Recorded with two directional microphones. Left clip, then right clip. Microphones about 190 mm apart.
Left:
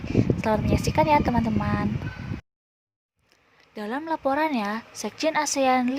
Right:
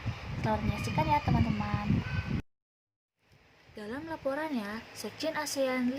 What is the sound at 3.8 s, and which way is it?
Speech, 50° left (ahead or behind).